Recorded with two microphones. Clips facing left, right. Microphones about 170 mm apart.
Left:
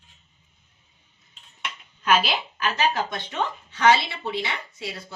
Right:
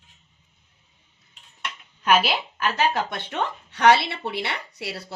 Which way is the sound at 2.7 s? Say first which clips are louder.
Even; 60° right (ahead or behind).